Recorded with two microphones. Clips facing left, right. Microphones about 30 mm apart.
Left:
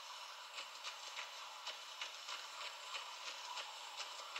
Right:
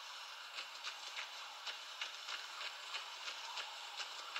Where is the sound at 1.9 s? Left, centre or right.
Right.